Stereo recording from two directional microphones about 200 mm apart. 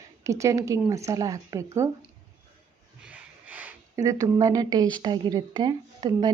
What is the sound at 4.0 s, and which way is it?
Speech, 20° right (ahead or behind).